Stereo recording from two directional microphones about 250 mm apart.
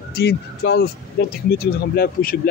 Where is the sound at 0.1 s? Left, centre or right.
Left.